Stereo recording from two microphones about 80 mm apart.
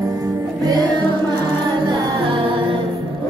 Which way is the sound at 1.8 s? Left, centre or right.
Right.